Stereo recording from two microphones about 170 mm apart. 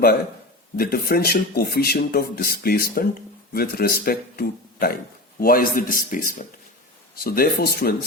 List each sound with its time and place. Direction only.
0.8 s speech: 65° left (ahead or behind)